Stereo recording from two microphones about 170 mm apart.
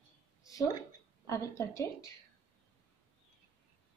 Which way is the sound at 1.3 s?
20° left (ahead or behind).